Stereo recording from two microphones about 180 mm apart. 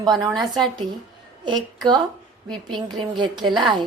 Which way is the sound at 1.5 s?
25° right (ahead or behind).